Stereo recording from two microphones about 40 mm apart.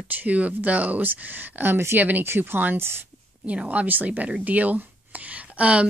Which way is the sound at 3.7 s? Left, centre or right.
Right.